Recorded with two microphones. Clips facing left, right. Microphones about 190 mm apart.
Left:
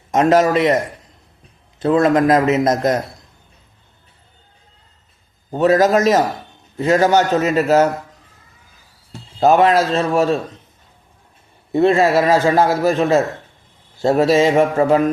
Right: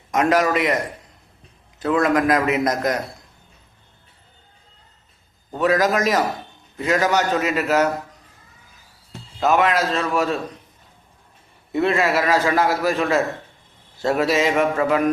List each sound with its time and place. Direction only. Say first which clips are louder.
0.1 s a man's voice: left 5 dB; 25° left (ahead or behind)
1.8 s a man's voice: left 5 dB; 25° left (ahead or behind)
5.5 s a man's voice: left 5 dB; 30° left (ahead or behind)
9.4 s a man's voice: left 6 dB; 35° left (ahead or behind)
11.7 s a man's voice: left 6 dB; 30° left (ahead or behind)